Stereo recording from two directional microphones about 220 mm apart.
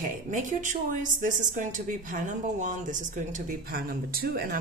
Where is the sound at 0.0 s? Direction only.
35° right (ahead or behind).